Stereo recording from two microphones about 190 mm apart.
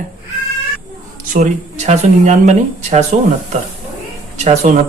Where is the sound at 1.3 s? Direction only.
45° right (ahead or behind).